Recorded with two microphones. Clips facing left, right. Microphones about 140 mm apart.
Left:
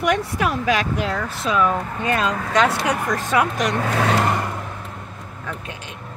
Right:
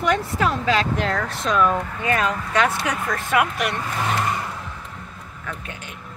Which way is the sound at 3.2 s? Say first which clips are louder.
Left 1 dB; 40° left (ahead or behind).